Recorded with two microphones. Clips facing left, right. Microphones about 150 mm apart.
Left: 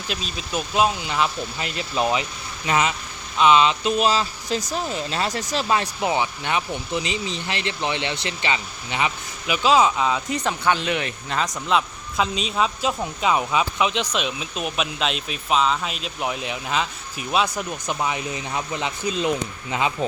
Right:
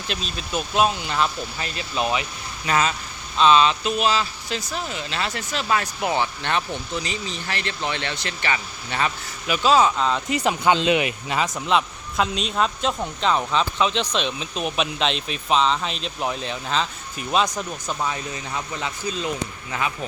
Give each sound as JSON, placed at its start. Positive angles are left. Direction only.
{"t": 0.1, "sound": "speech", "side_deg": 5}
{"t": 1.5, "sound": "speech", "side_deg": 20}
{"t": 5.6, "sound": "speech", "side_deg": 25}